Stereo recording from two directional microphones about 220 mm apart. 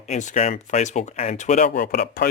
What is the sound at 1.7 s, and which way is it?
Speech, 45° left (ahead or behind).